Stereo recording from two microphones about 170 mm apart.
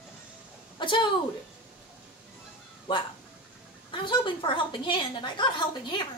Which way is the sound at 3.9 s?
30° left (ahead or behind).